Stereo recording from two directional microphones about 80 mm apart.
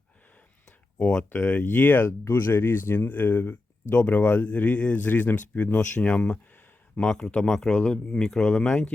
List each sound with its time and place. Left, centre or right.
0.9 s speech: centre